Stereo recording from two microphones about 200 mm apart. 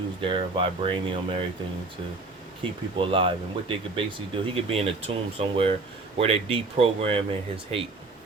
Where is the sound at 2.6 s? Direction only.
25° right (ahead or behind).